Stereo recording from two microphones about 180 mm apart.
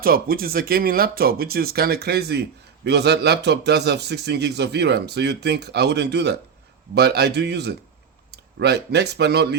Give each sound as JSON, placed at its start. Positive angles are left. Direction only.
{"t": 0.0, "sound": "a man's voice", "side_deg": -55}